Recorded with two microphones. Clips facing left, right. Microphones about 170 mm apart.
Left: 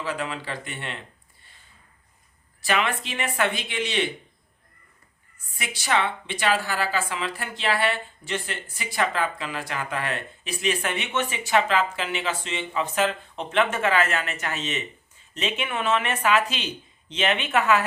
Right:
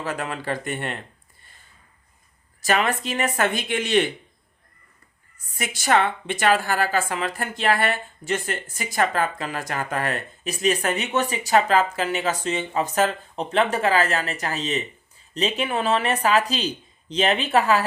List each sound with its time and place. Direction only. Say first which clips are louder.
0.0 s a woman's voice: right 2 dB; 50° right (ahead or behind)
2.6 s a woman's voice: right 3 dB; 45° right (ahead or behind)
5.5 s a woman's voice: right 4 dB; 45° right (ahead or behind)